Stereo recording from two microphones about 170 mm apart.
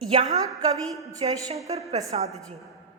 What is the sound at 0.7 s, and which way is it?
Speech, 20° right (ahead or behind).